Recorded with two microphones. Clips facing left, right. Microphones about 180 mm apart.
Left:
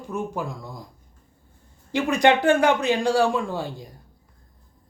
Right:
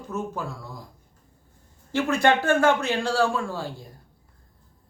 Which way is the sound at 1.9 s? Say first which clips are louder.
Left 2 dB; 15° left (ahead or behind).